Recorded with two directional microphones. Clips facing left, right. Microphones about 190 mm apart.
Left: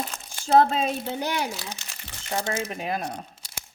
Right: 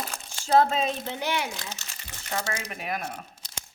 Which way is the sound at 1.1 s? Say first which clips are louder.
Left 2 dB; 40° left (ahead or behind).